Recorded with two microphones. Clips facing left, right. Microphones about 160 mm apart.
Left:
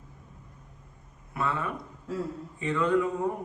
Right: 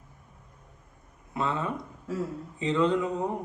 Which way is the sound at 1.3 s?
20° right (ahead or behind).